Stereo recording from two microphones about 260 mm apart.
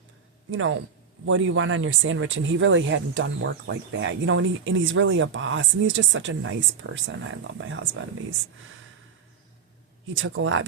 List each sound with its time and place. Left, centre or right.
0.5 s speech: right
10.2 s speech: right